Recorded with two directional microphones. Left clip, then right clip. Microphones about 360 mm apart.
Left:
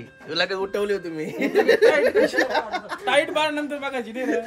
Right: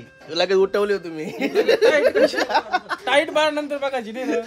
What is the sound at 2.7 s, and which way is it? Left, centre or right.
Speech, right.